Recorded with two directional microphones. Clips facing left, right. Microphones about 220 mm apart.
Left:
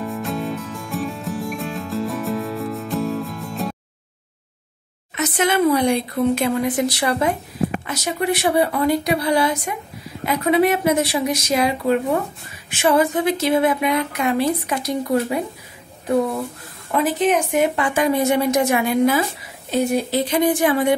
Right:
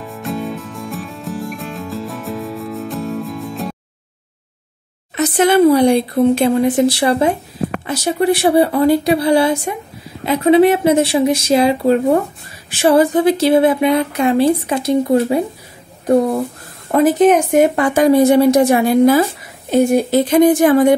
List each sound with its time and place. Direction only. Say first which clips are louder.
0.0 s music: right 1 dB; centre (ahead or behind)
5.1 s speech: right 7 dB; 35° right (ahead or behind)
16.9 s speech: right 7 dB; 45° right (ahead or behind)
19.7 s speech: right 7 dB; 50° right (ahead or behind)